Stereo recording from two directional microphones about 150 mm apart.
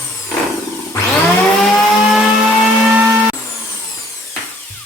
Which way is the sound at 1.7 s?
5° right (ahead or behind).